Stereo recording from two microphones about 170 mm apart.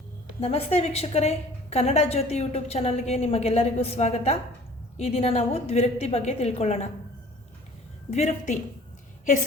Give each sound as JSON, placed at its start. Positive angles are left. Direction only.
{"t": 0.3, "sound": "a woman's voice", "side_deg": 35}
{"t": 8.1, "sound": "a woman's voice", "side_deg": 45}